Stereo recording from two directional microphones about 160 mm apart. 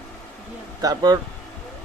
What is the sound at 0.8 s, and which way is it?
Speech, 25° right (ahead or behind).